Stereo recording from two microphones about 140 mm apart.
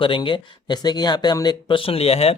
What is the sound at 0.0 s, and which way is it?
Speech, 35° left (ahead or behind).